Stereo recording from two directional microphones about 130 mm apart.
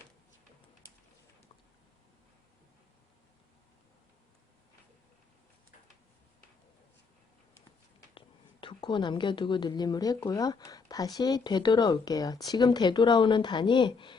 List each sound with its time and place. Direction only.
8.6 s speech: 35° left (ahead or behind)